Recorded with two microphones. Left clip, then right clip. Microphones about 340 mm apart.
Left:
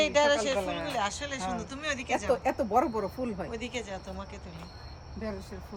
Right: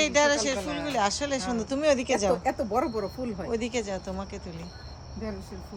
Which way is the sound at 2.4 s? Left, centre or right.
Left.